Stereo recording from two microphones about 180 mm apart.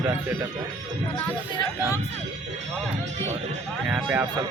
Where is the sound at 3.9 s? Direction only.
5° right (ahead or behind).